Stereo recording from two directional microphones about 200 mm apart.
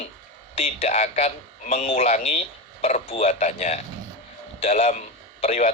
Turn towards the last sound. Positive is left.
turn(degrees=35)  # may be behind; listen again after turning